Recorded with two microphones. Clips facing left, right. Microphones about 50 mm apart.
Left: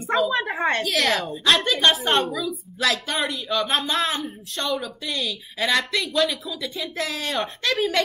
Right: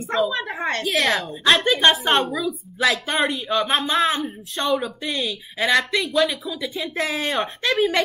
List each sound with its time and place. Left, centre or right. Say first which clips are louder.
0.3 s a woman's voice: left 2 dB; centre
0.8 s a woman's voice: right 1 dB; centre
2.3 s a woman's voice: right 3 dB; centre
2.9 s a woman's voice: right 3 dB; centre
4.6 s a woman's voice: right 4 dB; right
5.0 s a woman's voice: right 2 dB; centre